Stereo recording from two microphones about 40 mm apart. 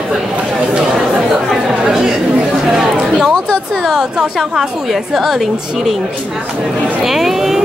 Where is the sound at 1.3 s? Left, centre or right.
Centre.